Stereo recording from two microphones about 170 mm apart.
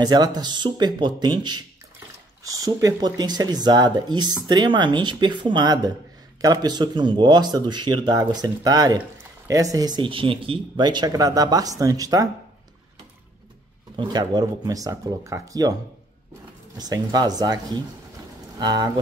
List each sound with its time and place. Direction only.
0.0 s speech: 25° right (ahead or behind)
13.9 s speech: 25° right (ahead or behind)
16.7 s speech: 25° right (ahead or behind)